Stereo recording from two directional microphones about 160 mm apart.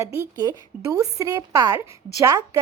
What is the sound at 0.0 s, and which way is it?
A woman's voice, 20° right (ahead or behind).